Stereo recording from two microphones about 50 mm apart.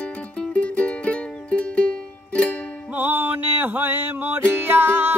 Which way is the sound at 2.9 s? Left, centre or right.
Right.